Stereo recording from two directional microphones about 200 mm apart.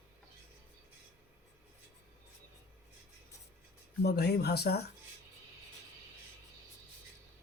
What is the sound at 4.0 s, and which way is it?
Speech, 55° left (ahead or behind).